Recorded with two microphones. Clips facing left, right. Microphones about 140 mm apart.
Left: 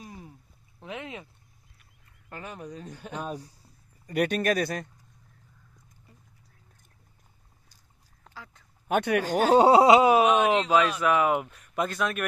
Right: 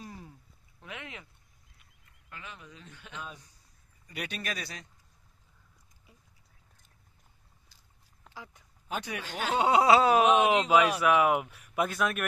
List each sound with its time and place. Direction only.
0.0 s a sound: 20° left (ahead or behind)
2.2 s speech: 45° left (ahead or behind)
4.1 s speech: 50° left (ahead or behind)
8.3 s duck: 15° right (ahead or behind)
8.8 s speech: 60° left (ahead or behind)
9.2 s speech: 40° left (ahead or behind)
9.8 s speech: 15° left (ahead or behind)
10.1 s speech: centre (ahead or behind)